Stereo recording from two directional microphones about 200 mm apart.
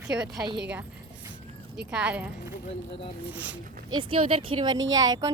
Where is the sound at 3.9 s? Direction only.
25° right (ahead or behind).